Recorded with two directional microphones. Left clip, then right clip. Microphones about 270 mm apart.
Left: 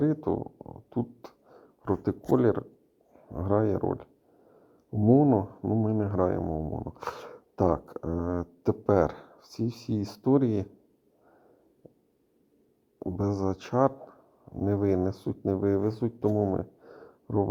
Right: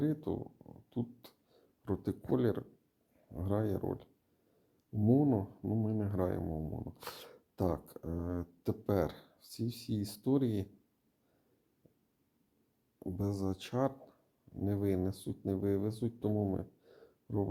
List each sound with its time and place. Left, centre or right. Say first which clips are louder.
0.0 s a sound: left 9 dB; centre
3.3 s speech: left 10 dB; centre
13.0 s speech: left 9 dB; centre